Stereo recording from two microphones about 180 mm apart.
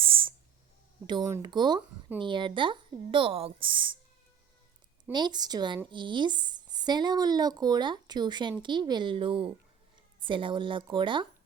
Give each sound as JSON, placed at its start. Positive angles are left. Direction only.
{"t": 0.0, "sound": "a sound", "side_deg": -30}
{"t": 1.0, "sound": "speech", "side_deg": -20}
{"t": 5.1, "sound": "speech", "side_deg": -25}